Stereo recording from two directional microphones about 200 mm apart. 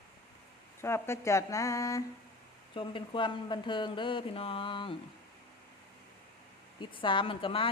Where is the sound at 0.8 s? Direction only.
15° left (ahead or behind).